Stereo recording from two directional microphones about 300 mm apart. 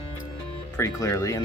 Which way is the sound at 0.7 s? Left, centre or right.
Centre.